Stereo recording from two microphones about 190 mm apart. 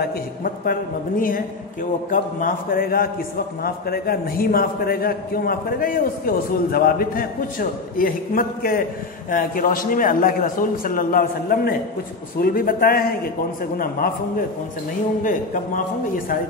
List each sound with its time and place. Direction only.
0.0 s a man's voice: 50° left (ahead or behind)